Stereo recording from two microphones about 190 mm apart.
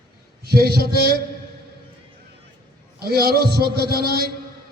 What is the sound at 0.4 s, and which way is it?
Speech, 55° right (ahead or behind).